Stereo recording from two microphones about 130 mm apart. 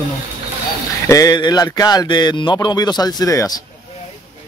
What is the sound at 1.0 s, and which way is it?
Speech, 25° left (ahead or behind).